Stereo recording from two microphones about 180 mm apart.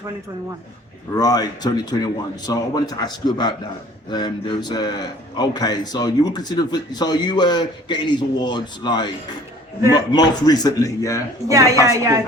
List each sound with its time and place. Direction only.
1.1 s a man's voice: 20° left (ahead or behind)
11.4 s a woman's voice: 15° right (ahead or behind)